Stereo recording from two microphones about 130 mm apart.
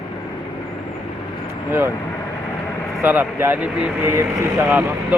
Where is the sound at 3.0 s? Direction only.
15° right (ahead or behind).